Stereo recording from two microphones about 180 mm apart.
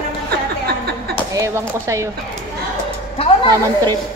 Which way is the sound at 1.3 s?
15° right (ahead or behind).